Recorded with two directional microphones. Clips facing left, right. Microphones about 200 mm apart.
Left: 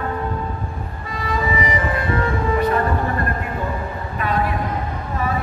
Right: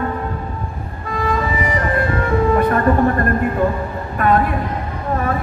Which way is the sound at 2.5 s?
50° right (ahead or behind).